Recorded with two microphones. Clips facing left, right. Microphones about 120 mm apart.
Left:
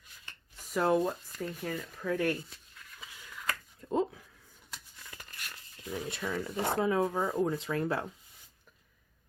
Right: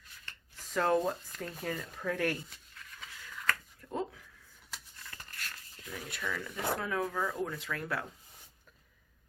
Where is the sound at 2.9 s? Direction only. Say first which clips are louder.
Right 1 dB; 5° left (ahead or behind).